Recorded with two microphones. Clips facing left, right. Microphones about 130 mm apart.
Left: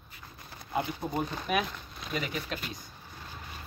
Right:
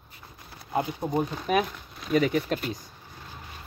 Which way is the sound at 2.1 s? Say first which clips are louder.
Right 11 dB; 40° right (ahead or behind).